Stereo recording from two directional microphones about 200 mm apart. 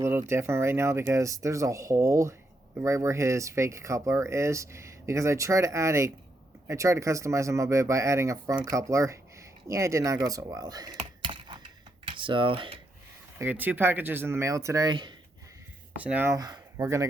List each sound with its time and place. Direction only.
0.0 s speech: 15° right (ahead or behind)
11.2 s computer keyboard: 25° right (ahead or behind)
13.4 s speech: 10° right (ahead or behind)
16.0 s speech: 10° right (ahead or behind)